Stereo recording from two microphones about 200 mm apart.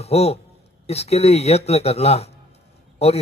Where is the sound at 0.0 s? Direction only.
30° left (ahead or behind).